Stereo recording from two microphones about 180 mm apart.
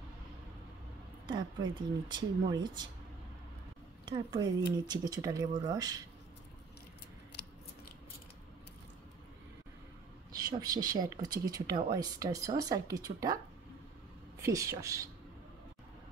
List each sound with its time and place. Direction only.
1.2 s speech: 25° right (ahead or behind)
4.1 s speech: 25° right (ahead or behind)
10.3 s speech: 20° right (ahead or behind)
14.4 s a woman's voice: 15° right (ahead or behind)